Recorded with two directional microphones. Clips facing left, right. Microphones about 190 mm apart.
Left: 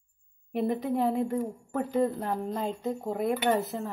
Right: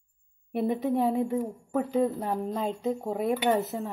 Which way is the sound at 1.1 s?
20° right (ahead or behind).